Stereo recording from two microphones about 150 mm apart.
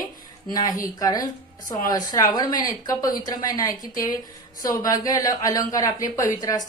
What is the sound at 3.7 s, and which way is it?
Speech, 65° left (ahead or behind).